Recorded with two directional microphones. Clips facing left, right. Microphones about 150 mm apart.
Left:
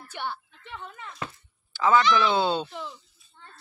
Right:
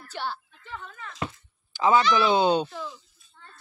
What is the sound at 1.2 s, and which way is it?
Speech, 15° right (ahead or behind).